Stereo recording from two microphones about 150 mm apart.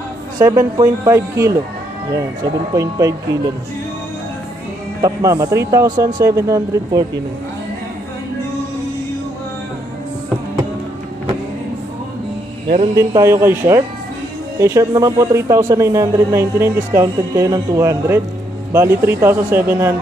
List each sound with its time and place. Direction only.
0.4 s speech: 25° right (ahead or behind)
2.7 s speech: 20° right (ahead or behind)
5.0 s speech: 20° right (ahead or behind)
12.9 s a man's voice: 20° right (ahead or behind)